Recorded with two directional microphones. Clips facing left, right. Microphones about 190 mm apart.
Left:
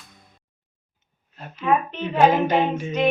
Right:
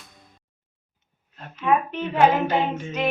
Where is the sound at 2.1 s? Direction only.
10° left (ahead or behind).